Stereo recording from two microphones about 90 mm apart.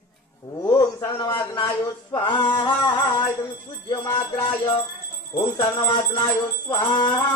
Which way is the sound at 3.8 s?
50° left (ahead or behind).